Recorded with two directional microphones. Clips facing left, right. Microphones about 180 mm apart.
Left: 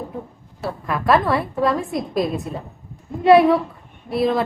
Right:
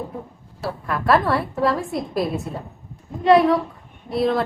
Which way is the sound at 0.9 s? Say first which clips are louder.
Left 1 dB; centre (ahead or behind).